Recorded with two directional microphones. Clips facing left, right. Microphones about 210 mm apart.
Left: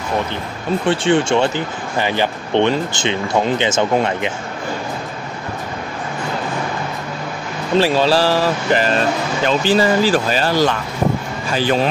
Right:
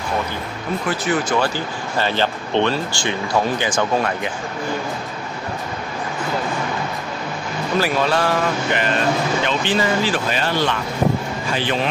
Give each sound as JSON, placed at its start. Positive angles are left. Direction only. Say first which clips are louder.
{"t": 0.8, "sound": "speech", "louder": "left 6 dB", "side_deg": 30}
{"t": 7.7, "sound": "speech", "louder": "left 5 dB", "side_deg": 30}